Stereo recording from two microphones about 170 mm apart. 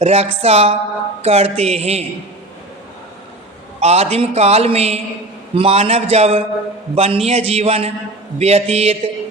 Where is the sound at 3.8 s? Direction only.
40° right (ahead or behind).